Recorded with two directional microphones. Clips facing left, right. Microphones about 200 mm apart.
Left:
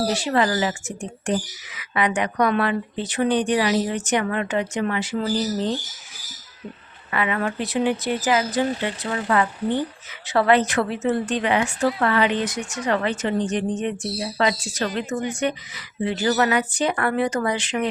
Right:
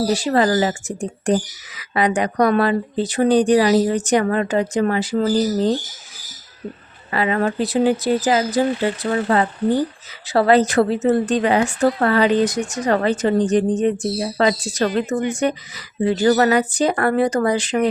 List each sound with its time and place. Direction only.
0.1 s a woman's voice: 35° right (ahead or behind)
7.1 s a woman's voice: 35° right (ahead or behind)